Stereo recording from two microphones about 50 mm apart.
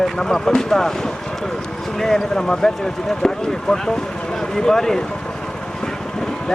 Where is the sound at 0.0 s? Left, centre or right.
Centre.